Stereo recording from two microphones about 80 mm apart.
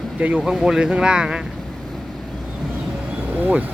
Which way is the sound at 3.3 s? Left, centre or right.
Right.